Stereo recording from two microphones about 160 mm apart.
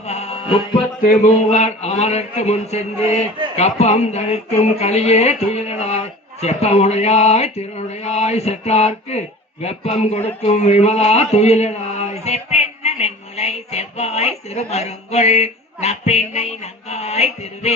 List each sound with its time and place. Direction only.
0.1 s music: 40° left (ahead or behind)
1.0 s speech: 45° left (ahead or behind)